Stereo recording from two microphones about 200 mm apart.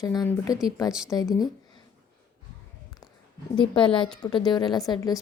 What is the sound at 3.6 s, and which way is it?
Speech, 25° left (ahead or behind).